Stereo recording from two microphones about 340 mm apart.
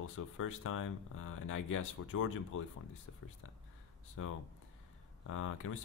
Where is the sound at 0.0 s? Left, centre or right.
Left.